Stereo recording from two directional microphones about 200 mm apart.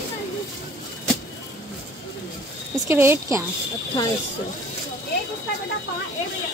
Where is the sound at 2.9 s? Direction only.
10° right (ahead or behind).